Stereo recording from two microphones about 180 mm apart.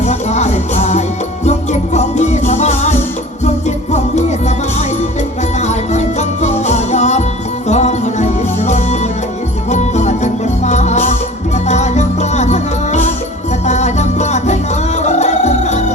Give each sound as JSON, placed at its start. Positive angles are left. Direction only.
{"t": 0.0, "sound": "music", "side_deg": 40}
{"t": 3.9, "sound": "music", "side_deg": 40}
{"t": 5.6, "sound": "music", "side_deg": 40}